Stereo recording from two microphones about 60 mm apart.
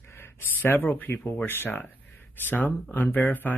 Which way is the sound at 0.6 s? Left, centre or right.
Left.